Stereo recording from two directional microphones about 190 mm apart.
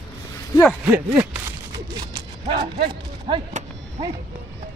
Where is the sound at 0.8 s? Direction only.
10° right (ahead or behind).